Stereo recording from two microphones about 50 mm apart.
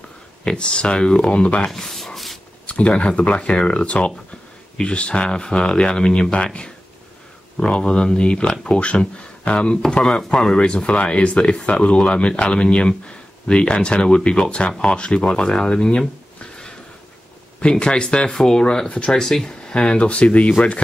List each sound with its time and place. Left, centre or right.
0.5 s speech: centre
1.7 s a sound: centre
2.6 s speech: left
17.6 s speech: centre
19.1 s speech: centre; by 20.8 s left